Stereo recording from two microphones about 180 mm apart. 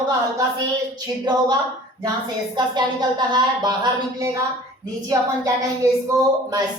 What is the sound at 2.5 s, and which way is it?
Speech, 25° right (ahead or behind).